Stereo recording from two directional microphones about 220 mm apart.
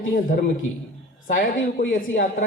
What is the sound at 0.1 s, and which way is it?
A man's voice, 40° left (ahead or behind).